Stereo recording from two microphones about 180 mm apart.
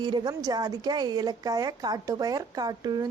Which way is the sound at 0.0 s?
25° right (ahead or behind).